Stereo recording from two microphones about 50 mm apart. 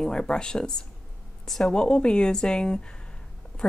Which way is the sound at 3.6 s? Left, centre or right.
Centre.